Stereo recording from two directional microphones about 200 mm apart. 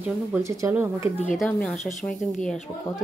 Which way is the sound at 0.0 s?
10° right (ahead or behind).